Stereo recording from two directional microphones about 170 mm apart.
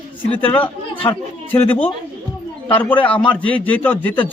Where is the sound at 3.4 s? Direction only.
10° left (ahead or behind).